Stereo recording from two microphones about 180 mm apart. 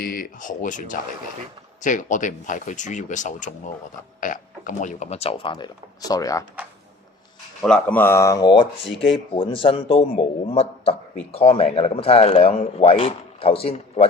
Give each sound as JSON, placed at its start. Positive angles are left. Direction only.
{"t": 0.0, "sound": "a man's voice", "side_deg": 55}
{"t": 7.6, "sound": "a man's voice", "side_deg": 5}